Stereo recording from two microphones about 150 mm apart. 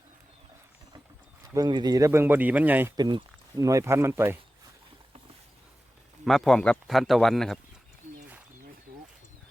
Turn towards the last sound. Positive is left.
turn(degrees=5)  # may be behind; listen again after turning